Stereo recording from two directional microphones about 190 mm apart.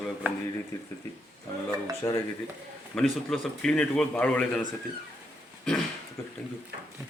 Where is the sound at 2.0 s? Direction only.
20° left (ahead or behind).